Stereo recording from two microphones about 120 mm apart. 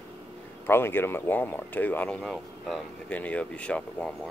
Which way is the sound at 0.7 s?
20° left (ahead or behind).